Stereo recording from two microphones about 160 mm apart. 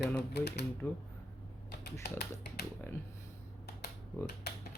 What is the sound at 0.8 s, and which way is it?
Speech, 15° left (ahead or behind).